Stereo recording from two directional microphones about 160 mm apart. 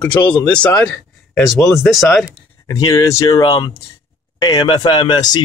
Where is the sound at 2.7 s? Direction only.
20° left (ahead or behind).